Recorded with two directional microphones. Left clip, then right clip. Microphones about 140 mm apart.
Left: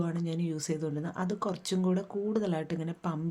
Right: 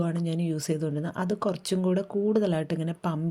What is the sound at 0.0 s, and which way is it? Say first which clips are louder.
Speech: right 4 dB; 35° right (ahead or behind).